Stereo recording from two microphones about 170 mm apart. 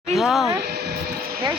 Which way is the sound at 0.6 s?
70° right (ahead or behind).